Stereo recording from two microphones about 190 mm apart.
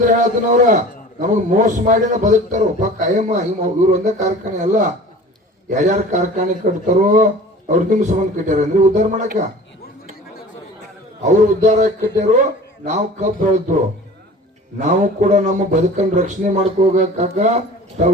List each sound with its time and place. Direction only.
0.0 s a man's voice: 40° right (ahead or behind)
11.2 s a man's voice: 40° right (ahead or behind)
14.8 s a man's voice: 40° right (ahead or behind)